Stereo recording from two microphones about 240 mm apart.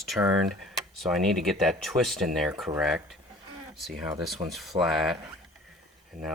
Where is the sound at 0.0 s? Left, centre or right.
Centre.